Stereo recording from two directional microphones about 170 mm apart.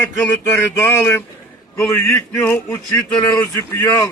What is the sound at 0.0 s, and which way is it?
Speech, 15° left (ahead or behind).